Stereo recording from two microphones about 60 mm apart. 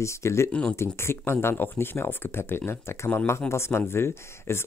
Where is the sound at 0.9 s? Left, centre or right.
Left.